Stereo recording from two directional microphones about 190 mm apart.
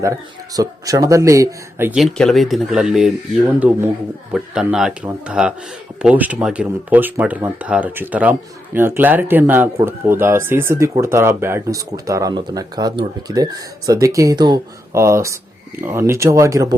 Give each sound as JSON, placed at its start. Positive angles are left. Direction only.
{"t": 0.0, "sound": "speech", "side_deg": -15}
{"t": 1.9, "sound": "speech", "side_deg": 0}